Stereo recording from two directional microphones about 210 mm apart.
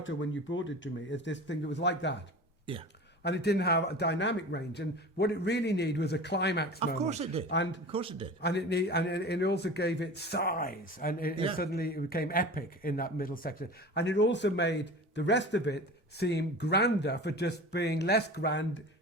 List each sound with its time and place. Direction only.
0.0 s speech: 65° left (ahead or behind)
3.2 s speech: 50° left (ahead or behind)
6.7 s speech: 30° right (ahead or behind)
7.4 s speech: 60° left (ahead or behind)
7.9 s a man's voice: 25° right (ahead or behind)
8.4 s speech: 55° left (ahead or behind)